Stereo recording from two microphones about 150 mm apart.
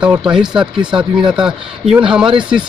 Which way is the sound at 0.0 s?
5° right (ahead or behind).